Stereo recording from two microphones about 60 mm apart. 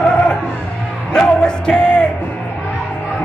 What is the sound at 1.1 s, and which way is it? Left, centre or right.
Music, centre.